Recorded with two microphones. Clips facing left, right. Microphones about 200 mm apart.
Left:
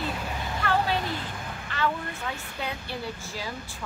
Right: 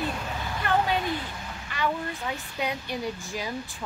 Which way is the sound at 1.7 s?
10° right (ahead or behind).